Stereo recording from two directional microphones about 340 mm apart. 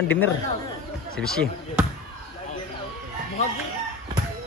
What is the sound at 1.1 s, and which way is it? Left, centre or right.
Basketball bounce, centre.